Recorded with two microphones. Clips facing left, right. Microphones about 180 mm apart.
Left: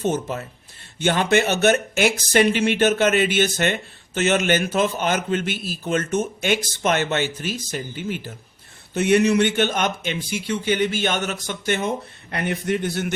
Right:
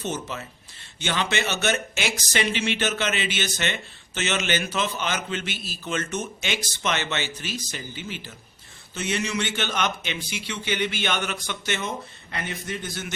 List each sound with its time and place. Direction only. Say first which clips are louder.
0.0 s speech: left 7 dB; 50° left (ahead or behind)
9.0 s speech: left 11 dB; 60° left (ahead or behind)